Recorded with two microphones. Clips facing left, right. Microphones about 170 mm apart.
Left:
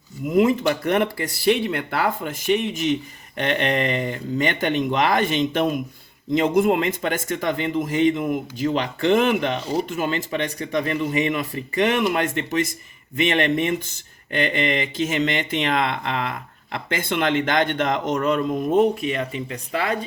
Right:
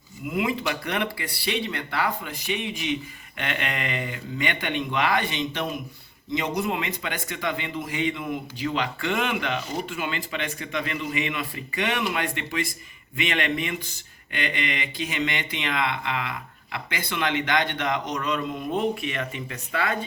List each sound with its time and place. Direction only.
0.3 s speech: 45° left (ahead or behind)